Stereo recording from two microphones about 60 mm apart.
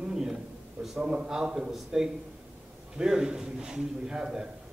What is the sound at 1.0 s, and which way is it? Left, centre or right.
A man's voice, centre.